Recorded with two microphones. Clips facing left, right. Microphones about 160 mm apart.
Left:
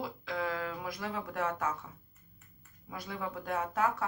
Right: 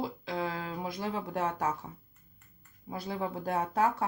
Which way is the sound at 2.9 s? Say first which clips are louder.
Right 4 dB; 30° right (ahead or behind).